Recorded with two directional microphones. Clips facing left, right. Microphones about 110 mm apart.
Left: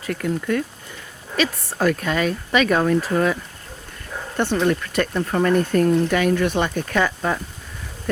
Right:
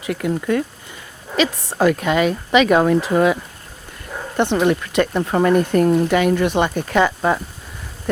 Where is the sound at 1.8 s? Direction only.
15° right (ahead or behind).